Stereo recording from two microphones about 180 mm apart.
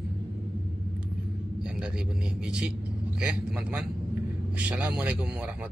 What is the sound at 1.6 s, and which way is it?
A man's voice, 5° right (ahead or behind).